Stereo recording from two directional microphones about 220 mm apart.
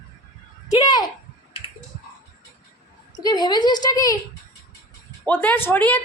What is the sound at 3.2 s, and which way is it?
Speech, 20° left (ahead or behind).